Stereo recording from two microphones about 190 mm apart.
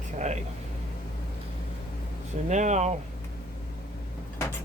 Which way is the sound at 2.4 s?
40° right (ahead or behind).